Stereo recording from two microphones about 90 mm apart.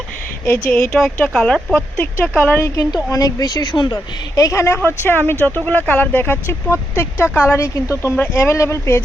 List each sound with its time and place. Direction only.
0.4 s speech: 15° left (ahead or behind)
2.4 s a woman's voice: 25° left (ahead or behind)
2.9 s a woman's voice: 40° left (ahead or behind)